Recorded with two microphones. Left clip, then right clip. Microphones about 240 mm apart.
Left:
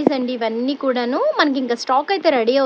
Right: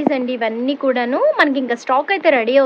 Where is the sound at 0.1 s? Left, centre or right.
Centre.